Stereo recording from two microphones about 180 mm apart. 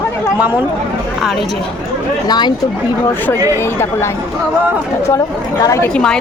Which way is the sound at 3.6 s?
15° left (ahead or behind).